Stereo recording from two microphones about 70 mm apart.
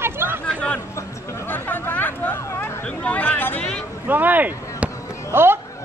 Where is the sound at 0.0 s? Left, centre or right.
Right.